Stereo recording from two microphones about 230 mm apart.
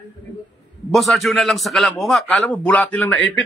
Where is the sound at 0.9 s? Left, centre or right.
Centre.